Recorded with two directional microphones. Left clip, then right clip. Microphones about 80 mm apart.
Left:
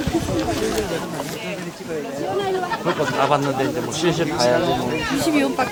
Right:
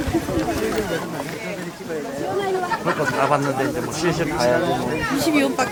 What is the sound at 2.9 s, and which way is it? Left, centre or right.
Speech, left.